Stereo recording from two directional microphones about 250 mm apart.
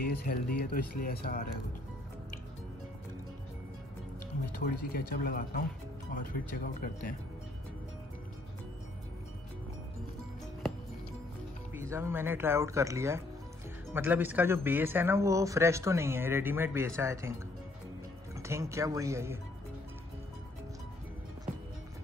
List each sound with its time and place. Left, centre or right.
0.0 s speech: left
4.5 s speech: left
11.7 s speech: centre
18.3 s speech: centre